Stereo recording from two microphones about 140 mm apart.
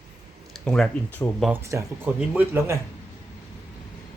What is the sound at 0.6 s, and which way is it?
Speech, 5° left (ahead or behind).